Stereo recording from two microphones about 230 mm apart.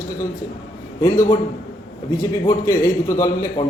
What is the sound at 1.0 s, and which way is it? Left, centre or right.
Speech, centre.